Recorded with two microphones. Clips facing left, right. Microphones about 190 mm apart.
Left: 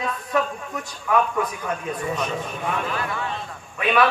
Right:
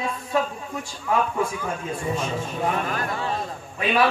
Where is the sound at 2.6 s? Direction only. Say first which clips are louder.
Right 3 dB; 40° right (ahead or behind).